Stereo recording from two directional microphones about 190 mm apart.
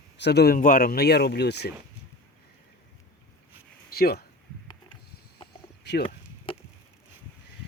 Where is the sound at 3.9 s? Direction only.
55° left (ahead or behind).